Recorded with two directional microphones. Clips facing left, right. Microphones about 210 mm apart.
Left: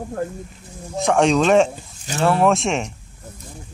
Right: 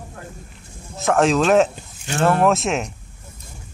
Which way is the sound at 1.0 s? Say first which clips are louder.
Left 1 dB; centre (ahead or behind).